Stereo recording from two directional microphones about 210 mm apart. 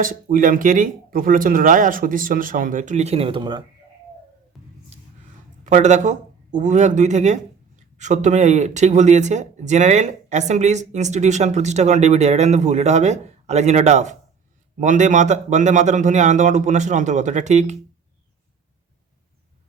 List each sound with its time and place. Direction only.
0.0 s speech: 40° right (ahead or behind); by 3.6 s 25° right (ahead or behind)
4.5 s music: centre (ahead or behind)
5.6 s speech: 35° right (ahead or behind)